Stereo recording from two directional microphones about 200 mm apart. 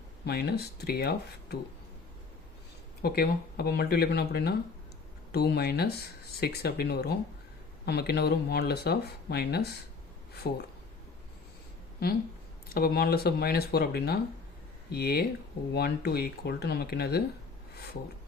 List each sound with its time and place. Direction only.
0.3 s speech: 50° left (ahead or behind)
3.0 s speech: 50° left (ahead or behind)
12.6 s speech: 50° left (ahead or behind)